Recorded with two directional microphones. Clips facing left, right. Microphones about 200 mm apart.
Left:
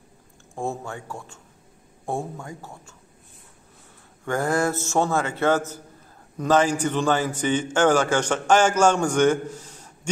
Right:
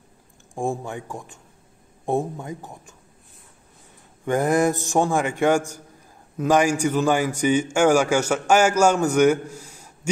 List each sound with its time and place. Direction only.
0.6 s a man's voice: 15° right (ahead or behind)
4.2 s a man's voice: 20° right (ahead or behind)